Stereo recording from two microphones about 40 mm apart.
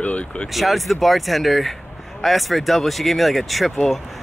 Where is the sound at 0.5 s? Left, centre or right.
Centre.